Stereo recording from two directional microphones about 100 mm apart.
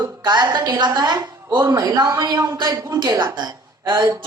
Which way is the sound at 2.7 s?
25° right (ahead or behind).